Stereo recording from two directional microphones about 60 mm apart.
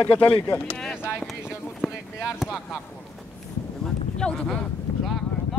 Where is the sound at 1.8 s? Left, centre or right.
Centre.